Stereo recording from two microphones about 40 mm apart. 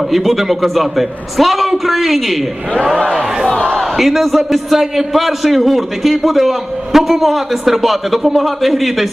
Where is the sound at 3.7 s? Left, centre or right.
Centre.